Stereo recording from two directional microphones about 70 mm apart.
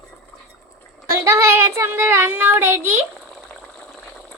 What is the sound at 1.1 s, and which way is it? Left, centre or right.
Child singing, right.